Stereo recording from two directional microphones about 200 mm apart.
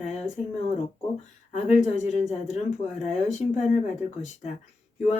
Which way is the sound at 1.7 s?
35° left (ahead or behind).